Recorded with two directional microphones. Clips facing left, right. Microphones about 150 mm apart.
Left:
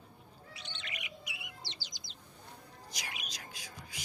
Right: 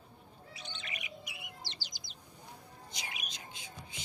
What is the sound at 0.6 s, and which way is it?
Bird, 45° right (ahead or behind).